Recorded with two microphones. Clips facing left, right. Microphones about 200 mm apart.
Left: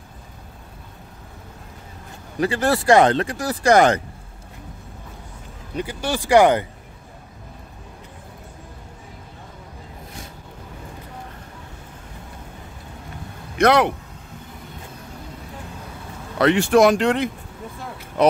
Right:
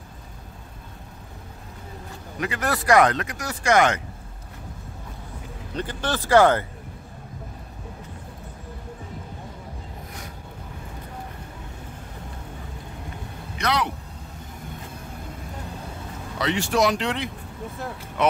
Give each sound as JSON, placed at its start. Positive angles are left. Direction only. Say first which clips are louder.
{"t": 2.4, "sound": "speech", "louder": "left 6 dB", "side_deg": 30}
{"t": 5.8, "sound": "speech", "louder": "left 2 dB", "side_deg": 10}
{"t": 13.6, "sound": "speech", "louder": "left 9 dB", "side_deg": 50}
{"t": 16.3, "sound": "speech", "louder": "left 8 dB", "side_deg": 55}